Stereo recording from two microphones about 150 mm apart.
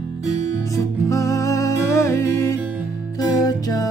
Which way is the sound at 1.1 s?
20° left (ahead or behind).